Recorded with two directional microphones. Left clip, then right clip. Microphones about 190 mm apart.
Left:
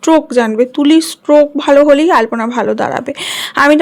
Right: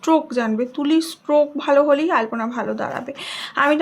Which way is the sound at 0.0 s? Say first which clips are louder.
Left 8 dB; 35° left (ahead or behind).